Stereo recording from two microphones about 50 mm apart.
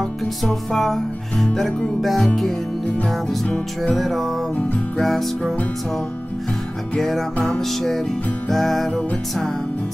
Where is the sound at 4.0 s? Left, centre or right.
Centre.